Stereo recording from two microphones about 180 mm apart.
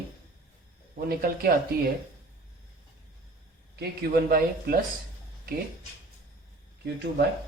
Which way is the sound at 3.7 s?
60° right (ahead or behind).